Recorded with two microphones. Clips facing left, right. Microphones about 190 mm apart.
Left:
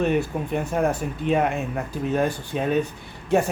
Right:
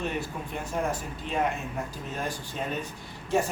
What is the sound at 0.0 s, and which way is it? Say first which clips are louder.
Speech: left 10 dB; 60° left (ahead or behind).